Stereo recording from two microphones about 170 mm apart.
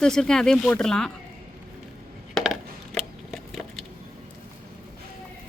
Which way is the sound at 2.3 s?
Centre (ahead or behind).